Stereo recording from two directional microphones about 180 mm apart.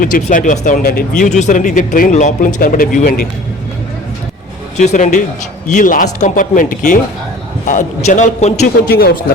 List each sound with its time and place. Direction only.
0.0 s speech: 45° left (ahead or behind)
4.8 s speech: 40° left (ahead or behind)
8.9 s speech: 60° left (ahead or behind)